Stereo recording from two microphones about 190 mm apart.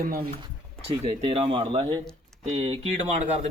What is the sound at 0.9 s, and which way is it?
A man's voice, 30° right (ahead or behind).